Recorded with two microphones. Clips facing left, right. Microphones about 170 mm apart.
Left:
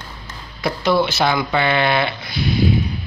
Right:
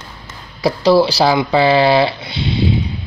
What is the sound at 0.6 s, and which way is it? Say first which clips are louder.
Speech: right 6 dB; 30° right (ahead or behind).